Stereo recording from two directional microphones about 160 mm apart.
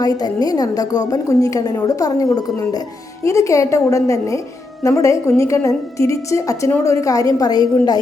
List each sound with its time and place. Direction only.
0.0 s a woman's voice: 25° left (ahead or behind)